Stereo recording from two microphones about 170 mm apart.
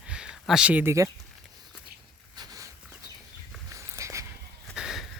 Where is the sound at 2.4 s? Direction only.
20° right (ahead or behind).